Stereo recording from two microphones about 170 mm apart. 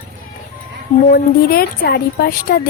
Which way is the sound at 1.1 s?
60° left (ahead or behind).